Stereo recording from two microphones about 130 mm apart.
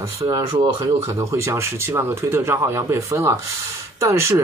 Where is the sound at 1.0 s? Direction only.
20° right (ahead or behind).